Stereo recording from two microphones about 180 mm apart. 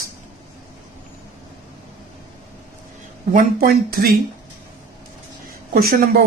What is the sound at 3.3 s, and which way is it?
Speech, 55° right (ahead or behind).